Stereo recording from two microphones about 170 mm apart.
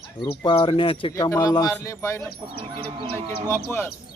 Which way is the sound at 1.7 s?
15° left (ahead or behind).